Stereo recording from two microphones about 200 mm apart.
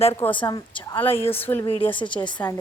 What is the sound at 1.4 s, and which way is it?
Speech, 10° left (ahead or behind).